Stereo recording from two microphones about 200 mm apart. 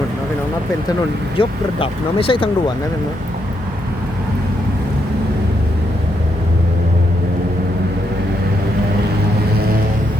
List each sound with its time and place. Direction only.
1.4 s speech: 25° left (ahead or behind)